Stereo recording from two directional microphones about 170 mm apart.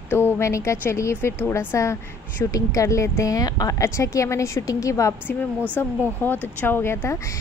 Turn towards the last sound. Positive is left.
turn(degrees=15)  # may be behind; listen again after turning